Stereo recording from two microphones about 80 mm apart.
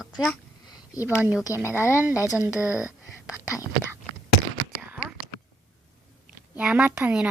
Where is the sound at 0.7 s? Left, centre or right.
Left.